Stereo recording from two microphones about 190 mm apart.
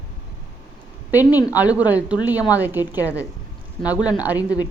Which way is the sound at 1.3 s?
20° left (ahead or behind).